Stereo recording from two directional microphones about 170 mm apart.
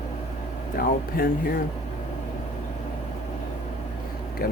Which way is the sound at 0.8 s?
60° left (ahead or behind).